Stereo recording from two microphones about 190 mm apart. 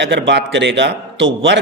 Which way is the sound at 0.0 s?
65° right (ahead or behind).